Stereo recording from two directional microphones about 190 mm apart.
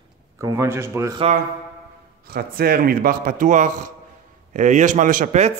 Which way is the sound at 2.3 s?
55° right (ahead or behind).